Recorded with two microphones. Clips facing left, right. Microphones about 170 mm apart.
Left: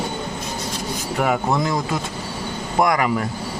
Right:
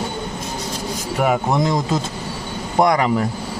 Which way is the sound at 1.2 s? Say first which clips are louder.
Right 2 dB; 20° right (ahead or behind).